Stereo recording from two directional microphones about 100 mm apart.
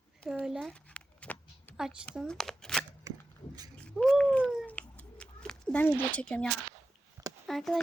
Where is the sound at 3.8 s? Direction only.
5° left (ahead or behind).